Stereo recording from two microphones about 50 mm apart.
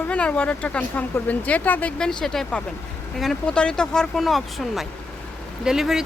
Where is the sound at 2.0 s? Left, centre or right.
Centre.